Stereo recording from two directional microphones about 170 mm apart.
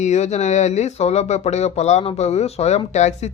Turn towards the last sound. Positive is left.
turn(degrees=40)  # may be behind; listen again after turning